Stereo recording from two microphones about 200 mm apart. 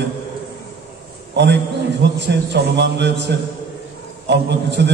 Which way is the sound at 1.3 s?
60° right (ahead or behind).